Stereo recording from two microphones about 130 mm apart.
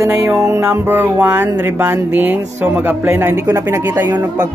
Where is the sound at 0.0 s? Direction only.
20° right (ahead or behind).